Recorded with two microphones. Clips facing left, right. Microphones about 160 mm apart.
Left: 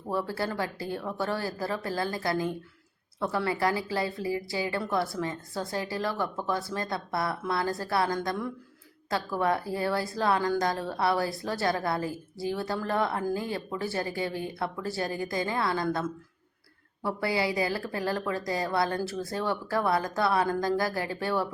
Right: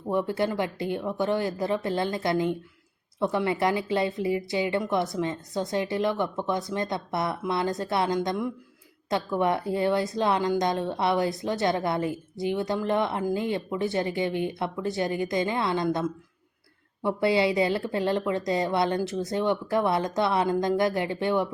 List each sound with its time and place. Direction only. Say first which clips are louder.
0.1 s a woman's voice: right 5 dB; 20° right (ahead or behind)